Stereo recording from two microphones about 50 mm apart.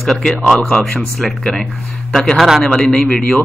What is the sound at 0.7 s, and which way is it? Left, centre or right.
Speech, centre.